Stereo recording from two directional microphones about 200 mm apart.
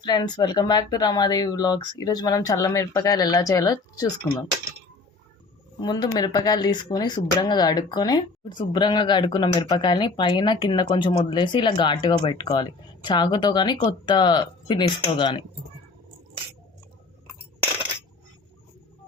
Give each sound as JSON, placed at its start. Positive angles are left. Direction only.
{"t": 0.0, "sound": "speech", "side_deg": 20}
{"t": 5.8, "sound": "speech", "side_deg": 20}